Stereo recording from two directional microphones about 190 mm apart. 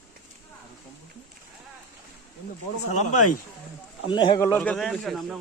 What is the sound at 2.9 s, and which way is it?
Speech, 40° left (ahead or behind).